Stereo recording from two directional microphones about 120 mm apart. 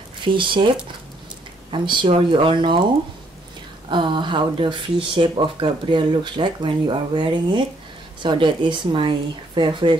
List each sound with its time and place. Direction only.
0.2 s speech: 45° right (ahead or behind)
1.7 s speech: 45° right (ahead or behind)
3.9 s speech: 40° right (ahead or behind)